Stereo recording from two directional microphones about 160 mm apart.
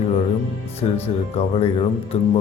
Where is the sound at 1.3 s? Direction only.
40° left (ahead or behind).